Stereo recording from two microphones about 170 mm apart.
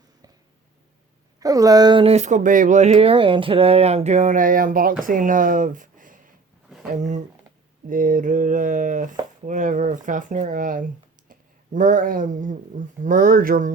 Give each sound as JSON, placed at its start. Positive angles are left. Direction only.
{"t": 1.4, "sound": "speech", "side_deg": -20}